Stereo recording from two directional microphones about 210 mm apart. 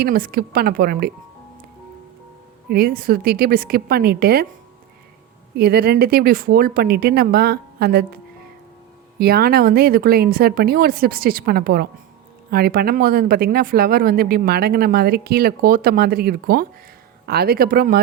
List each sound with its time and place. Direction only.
0.0 s speech: 45° right (ahead or behind)
2.6 s speech: 45° right (ahead or behind)
5.5 s speech: 50° right (ahead or behind)